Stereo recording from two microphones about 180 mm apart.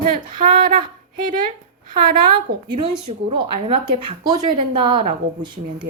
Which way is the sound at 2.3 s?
25° right (ahead or behind).